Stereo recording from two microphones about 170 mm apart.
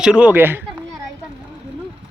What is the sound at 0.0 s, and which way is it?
Speech, 5° right (ahead or behind).